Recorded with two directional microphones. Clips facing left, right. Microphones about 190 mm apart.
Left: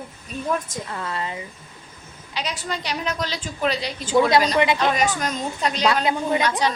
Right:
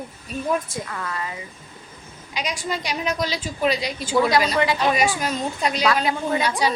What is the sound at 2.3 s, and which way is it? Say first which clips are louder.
A woman's voice: right 1 dB; 10° right (ahead or behind).